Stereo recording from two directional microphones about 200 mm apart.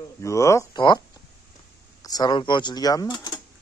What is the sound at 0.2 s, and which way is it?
Speech, 15° left (ahead or behind).